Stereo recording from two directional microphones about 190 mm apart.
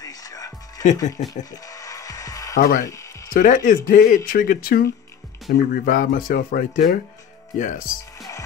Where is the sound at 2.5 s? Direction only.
45° left (ahead or behind).